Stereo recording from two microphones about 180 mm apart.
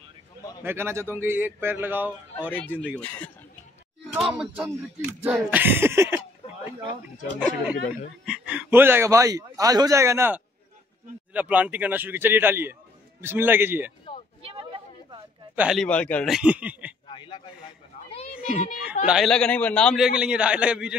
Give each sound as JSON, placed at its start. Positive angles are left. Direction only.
{"t": 0.6, "sound": "a man's voice", "side_deg": -15}
{"t": 3.0, "sound": "speech", "side_deg": 10}
{"t": 4.1, "sound": "a man's voice", "side_deg": 0}
{"t": 14.4, "sound": "a sound", "side_deg": -30}
{"t": 15.5, "sound": "a man's voice", "side_deg": -5}
{"t": 15.8, "sound": "speech", "side_deg": 5}
{"t": 17.1, "sound": "a sound", "side_deg": 25}
{"t": 18.1, "sound": "children playing", "side_deg": 35}
{"t": 19.0, "sound": "speech", "side_deg": 0}
{"t": 20.2, "sound": "speech", "side_deg": -5}